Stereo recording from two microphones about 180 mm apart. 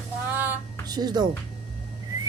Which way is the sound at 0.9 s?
20° right (ahead or behind).